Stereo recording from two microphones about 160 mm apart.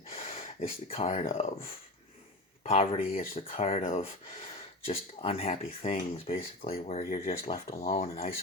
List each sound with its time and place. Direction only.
0.1 s speech: 40° left (ahead or behind)
2.6 s speech: 40° left (ahead or behind)